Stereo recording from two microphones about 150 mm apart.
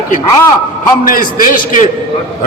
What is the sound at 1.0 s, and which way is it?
Speech, 65° left (ahead or behind).